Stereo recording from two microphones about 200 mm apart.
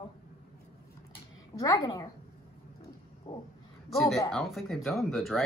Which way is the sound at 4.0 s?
Centre (ahead or behind).